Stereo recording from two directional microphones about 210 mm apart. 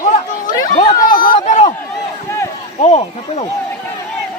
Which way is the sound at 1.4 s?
30° left (ahead or behind).